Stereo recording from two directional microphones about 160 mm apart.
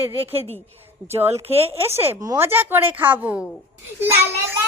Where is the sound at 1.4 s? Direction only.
40° right (ahead or behind).